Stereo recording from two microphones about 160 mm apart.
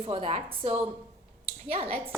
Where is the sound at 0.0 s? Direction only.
35° right (ahead or behind).